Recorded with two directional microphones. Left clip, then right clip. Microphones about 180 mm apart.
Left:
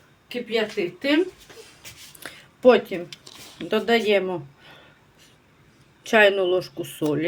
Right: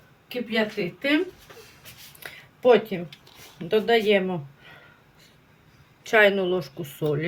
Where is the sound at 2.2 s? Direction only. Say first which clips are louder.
Left 4 dB; 25° left (ahead or behind).